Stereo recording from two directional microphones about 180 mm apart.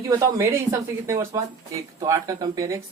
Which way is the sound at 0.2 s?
15° right (ahead or behind).